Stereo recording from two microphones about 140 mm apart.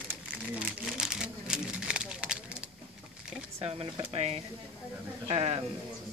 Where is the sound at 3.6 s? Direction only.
45° right (ahead or behind).